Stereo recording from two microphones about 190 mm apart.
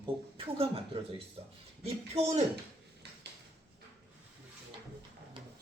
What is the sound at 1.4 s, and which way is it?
A man's voice, 30° right (ahead or behind).